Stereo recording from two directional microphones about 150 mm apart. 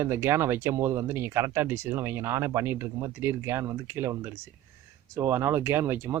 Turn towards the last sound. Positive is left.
turn(degrees=-15)  # may be behind; listen again after turning